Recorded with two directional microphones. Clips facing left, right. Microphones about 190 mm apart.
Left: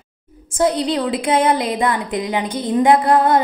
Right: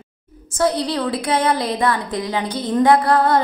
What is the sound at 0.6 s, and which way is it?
A woman's voice, 20° left (ahead or behind).